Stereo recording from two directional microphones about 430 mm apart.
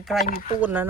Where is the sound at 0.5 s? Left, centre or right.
Centre.